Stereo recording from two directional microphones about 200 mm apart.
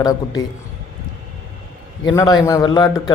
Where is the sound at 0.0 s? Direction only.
20° left (ahead or behind).